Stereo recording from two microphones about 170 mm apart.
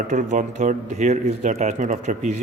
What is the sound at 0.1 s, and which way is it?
Speech, 45° right (ahead or behind).